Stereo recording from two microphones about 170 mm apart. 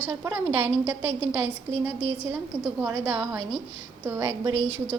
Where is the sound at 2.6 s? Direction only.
10° right (ahead or behind).